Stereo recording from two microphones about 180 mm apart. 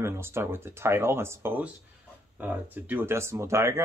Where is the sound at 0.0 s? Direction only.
15° right (ahead or behind).